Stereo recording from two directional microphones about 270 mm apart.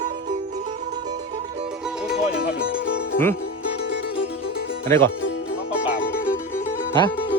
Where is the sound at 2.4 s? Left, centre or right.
Left.